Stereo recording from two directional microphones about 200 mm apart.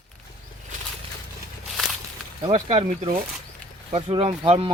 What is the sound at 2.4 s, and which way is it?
Speech, 30° right (ahead or behind).